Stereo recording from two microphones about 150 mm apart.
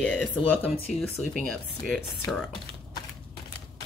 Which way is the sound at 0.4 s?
40° left (ahead or behind).